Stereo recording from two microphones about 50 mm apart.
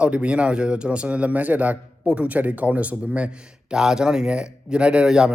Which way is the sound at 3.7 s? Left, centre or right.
Centre.